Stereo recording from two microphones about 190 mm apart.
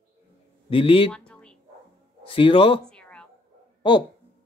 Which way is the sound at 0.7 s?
30° left (ahead or behind).